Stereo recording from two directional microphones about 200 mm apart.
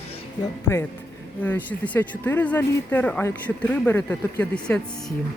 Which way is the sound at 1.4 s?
10° left (ahead or behind).